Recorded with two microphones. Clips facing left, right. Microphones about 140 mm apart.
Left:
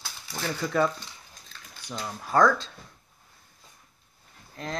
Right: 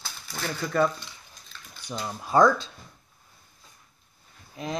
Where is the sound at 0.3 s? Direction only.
Centre (ahead or behind).